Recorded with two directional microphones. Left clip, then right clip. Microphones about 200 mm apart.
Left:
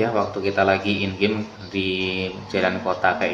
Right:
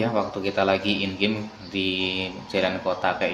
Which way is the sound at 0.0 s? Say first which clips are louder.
Left 3 dB; 25° right (ahead or behind).